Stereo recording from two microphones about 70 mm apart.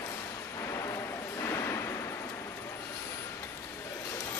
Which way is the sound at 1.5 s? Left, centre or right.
Left.